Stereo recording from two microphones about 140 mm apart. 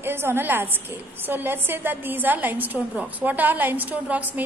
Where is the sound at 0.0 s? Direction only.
15° right (ahead or behind).